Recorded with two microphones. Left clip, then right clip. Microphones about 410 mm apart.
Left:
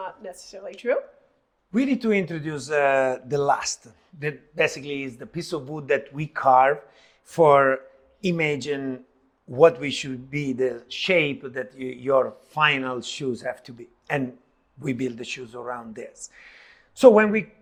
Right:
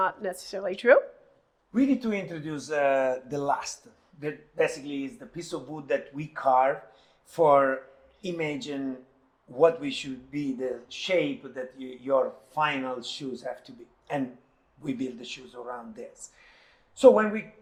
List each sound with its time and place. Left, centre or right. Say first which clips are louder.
0.0 s speech: right 7 dB; right
1.7 s speech: left 4 dB; left
9.5 s speech: left 5 dB; left
14.8 s speech: left 5 dB; left